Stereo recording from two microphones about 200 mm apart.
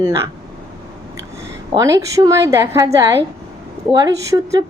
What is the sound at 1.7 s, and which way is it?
Speech, 15° right (ahead or behind).